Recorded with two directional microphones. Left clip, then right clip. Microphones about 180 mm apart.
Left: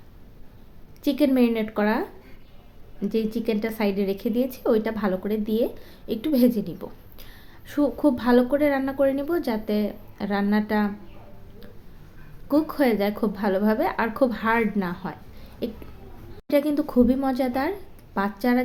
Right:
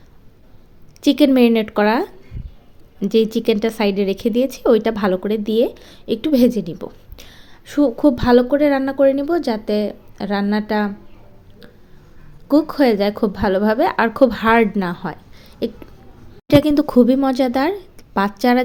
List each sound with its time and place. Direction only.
1.0 s speech: 45° right (ahead or behind)
12.5 s speech: 35° right (ahead or behind)